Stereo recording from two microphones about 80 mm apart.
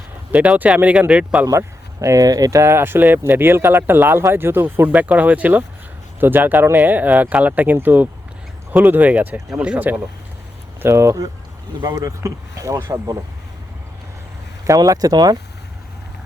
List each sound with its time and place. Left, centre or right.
0.3 s speech: centre
1.5 s speech: right; by 10.0 s centre
10.8 s speech: right
14.7 s speech: right